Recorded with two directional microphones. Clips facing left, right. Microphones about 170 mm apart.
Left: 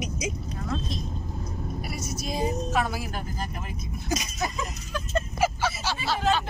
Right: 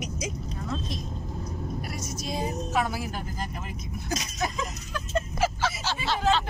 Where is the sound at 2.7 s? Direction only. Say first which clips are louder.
Even; 10° right (ahead or behind).